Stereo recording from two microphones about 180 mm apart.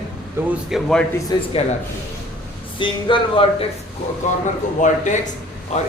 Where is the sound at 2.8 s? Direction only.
25° left (ahead or behind).